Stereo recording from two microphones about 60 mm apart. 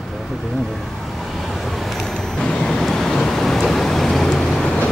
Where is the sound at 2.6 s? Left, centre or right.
Centre.